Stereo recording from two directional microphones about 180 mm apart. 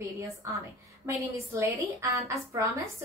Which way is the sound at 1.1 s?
15° right (ahead or behind).